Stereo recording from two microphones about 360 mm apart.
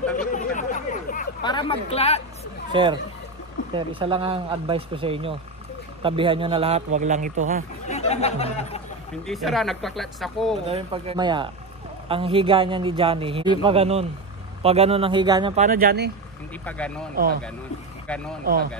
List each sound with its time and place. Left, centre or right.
0.1 s chatter: left
2.7 s a man's voice: centre
7.9 s speech: centre
9.3 s speech: centre
10.7 s speech: centre
16.6 s speech: centre
17.1 s a man's voice: right
18.0 s speech: centre
18.4 s a man's voice: right